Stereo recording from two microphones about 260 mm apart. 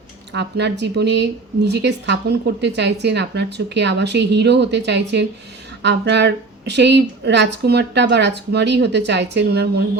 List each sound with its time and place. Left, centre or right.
0.3 s speech: right